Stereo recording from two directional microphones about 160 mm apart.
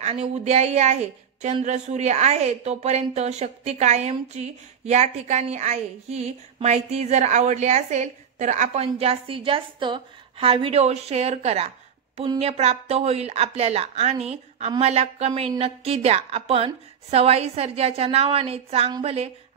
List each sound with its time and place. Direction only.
0.0 s a woman's voice: 45° right (ahead or behind)